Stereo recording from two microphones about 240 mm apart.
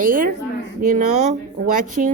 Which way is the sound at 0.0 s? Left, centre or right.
Right.